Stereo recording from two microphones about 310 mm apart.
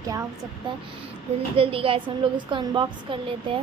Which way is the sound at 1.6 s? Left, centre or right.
Centre.